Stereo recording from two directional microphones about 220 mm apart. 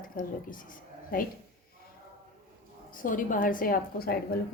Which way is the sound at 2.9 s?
40° left (ahead or behind).